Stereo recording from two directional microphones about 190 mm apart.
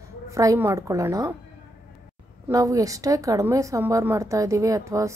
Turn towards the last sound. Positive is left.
turn(degrees=-15)  # may be behind; listen again after turning